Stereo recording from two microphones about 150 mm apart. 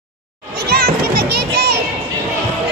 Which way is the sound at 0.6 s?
90° right.